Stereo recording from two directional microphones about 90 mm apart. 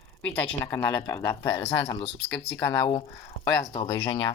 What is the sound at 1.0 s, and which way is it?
Speech, 35° left (ahead or behind).